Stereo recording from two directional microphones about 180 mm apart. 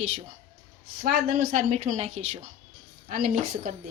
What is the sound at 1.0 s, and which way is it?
Speech, 50° right (ahead or behind).